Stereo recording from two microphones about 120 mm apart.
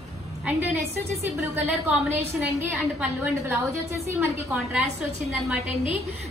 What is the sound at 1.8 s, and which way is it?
A woman's voice, 15° right (ahead or behind).